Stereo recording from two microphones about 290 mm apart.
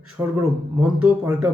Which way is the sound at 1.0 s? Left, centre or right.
Centre.